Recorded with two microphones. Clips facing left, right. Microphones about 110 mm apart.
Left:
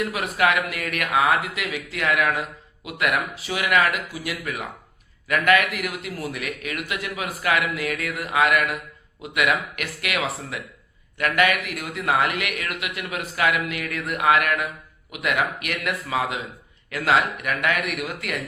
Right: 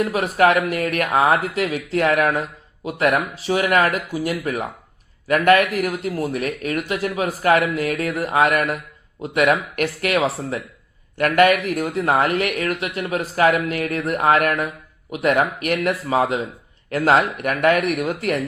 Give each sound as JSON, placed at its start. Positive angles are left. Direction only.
{"t": 0.0, "sound": "speech", "side_deg": -40}
{"t": 10.2, "sound": "speech", "side_deg": -30}
{"t": 11.2, "sound": "speech", "side_deg": -40}